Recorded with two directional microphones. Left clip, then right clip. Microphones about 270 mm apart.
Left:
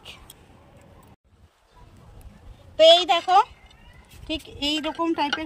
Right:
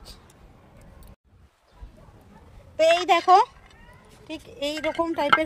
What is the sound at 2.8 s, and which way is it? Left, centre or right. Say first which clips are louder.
Speech: left 4 dB; right.